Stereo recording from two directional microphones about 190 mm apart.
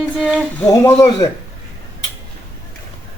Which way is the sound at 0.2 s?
5° right (ahead or behind).